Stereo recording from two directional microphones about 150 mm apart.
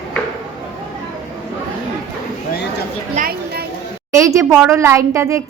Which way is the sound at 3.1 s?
75° right (ahead or behind).